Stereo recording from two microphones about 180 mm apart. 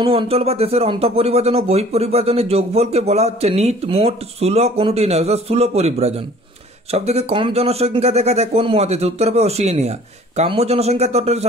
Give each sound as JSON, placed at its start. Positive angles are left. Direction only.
{"t": 0.0, "sound": "speech", "side_deg": -30}